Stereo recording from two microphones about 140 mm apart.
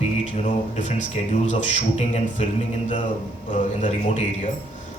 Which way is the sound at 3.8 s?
60° left (ahead or behind).